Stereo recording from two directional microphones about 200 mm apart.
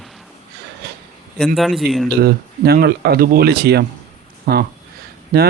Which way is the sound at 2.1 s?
50° right (ahead or behind).